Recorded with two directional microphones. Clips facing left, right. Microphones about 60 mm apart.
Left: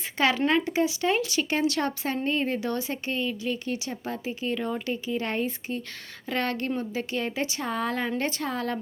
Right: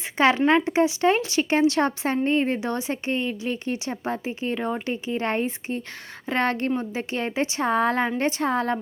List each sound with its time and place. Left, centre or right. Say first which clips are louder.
0.2 s a woman's voice: right 5 dB; right